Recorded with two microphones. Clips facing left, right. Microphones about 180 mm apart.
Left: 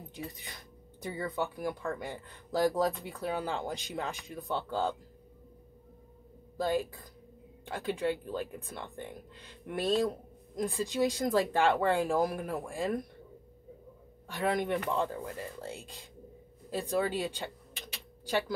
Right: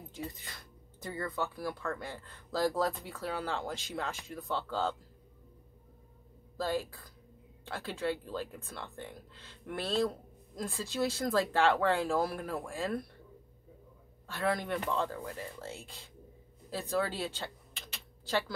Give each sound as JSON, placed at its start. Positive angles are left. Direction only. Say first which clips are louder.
{"t": 0.1, "sound": "speech", "louder": "right 1 dB", "side_deg": 15}
{"t": 6.5, "sound": "speech", "louder": "left 3 dB", "side_deg": 15}
{"t": 14.2, "sound": "speech", "louder": "left 2 dB", "side_deg": 15}
{"t": 16.7, "sound": "a sound", "louder": "left 3 dB", "side_deg": 15}